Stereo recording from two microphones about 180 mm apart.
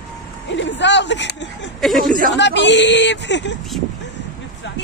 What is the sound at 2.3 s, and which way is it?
Speech, 75° left (ahead or behind).